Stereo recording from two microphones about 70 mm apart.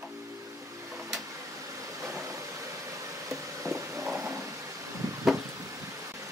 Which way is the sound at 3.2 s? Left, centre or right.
Right.